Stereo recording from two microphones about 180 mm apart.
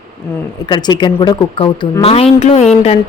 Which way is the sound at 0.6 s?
25° left (ahead or behind).